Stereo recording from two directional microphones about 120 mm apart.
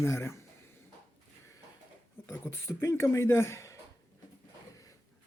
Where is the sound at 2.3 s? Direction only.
20° left (ahead or behind).